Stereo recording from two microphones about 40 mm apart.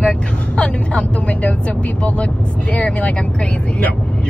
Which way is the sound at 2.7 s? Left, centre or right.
Left.